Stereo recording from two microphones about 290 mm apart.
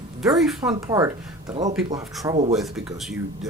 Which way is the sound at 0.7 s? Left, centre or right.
Centre.